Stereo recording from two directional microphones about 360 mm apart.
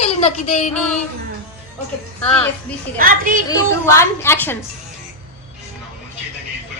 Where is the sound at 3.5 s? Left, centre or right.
Centre.